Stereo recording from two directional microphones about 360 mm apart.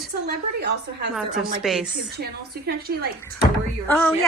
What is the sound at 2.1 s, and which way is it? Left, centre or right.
Speech, right.